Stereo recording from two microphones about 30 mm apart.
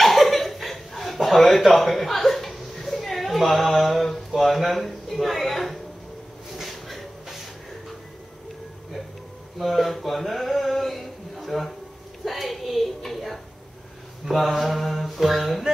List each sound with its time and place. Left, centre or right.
0.0 s chuckle: centre
4.3 s speech: centre
6.5 s a sound: centre
9.6 s a sound: centre
12.3 s music: centre
14.3 s mantra: centre